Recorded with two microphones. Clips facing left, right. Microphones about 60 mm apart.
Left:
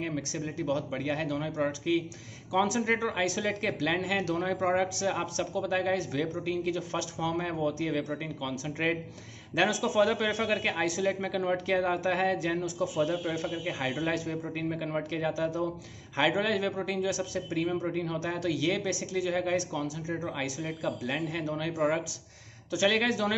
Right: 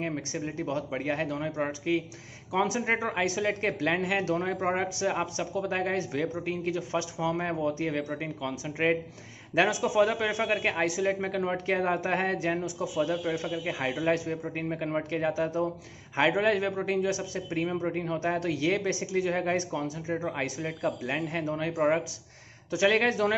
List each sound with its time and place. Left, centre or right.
0.0 s a man's voice: right